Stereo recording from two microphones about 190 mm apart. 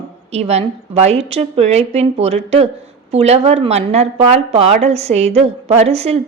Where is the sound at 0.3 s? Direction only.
35° right (ahead or behind).